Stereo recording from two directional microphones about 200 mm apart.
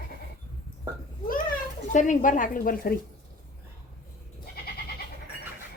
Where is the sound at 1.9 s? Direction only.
40° left (ahead or behind).